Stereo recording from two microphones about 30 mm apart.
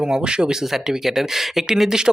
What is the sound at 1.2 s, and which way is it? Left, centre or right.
Speech, centre.